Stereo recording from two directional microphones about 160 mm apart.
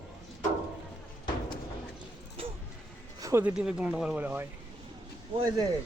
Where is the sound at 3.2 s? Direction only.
20° right (ahead or behind).